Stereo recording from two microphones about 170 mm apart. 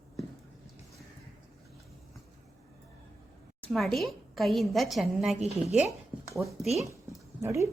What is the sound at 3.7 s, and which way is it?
A woman's voice, centre (ahead or behind).